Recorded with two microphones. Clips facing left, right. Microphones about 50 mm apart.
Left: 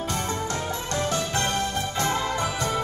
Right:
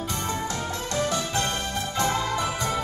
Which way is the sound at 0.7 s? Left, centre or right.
Left.